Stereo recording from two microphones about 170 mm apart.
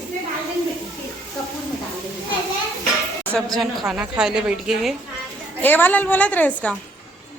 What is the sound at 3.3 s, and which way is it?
A woman's voice, centre (ahead or behind).